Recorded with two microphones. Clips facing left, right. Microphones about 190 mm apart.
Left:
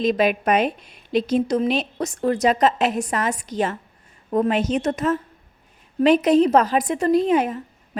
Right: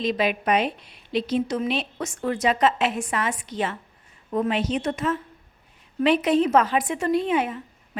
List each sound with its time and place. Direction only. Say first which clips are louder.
0.0 s a woman's voice: left 4 dB; 45° left (ahead or behind)